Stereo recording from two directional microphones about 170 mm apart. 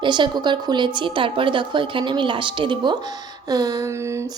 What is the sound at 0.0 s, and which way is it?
A woman's voice, 25° right (ahead or behind).